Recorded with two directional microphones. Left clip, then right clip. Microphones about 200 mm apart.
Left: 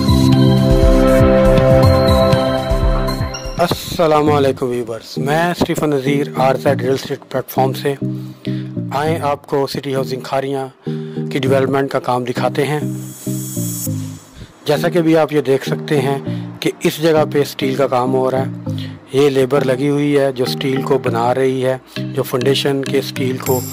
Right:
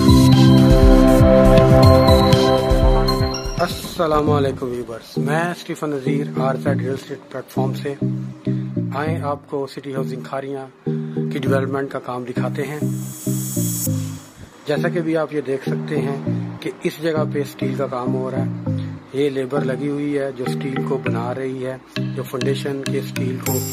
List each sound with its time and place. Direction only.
0.3 s music: centre (ahead or behind)
3.5 s speech: 40° left (ahead or behind)
12.8 s music: centre (ahead or behind)
14.7 s speech: 50° left (ahead or behind)